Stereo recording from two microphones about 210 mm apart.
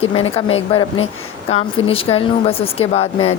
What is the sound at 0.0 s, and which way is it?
Speech, 25° left (ahead or behind).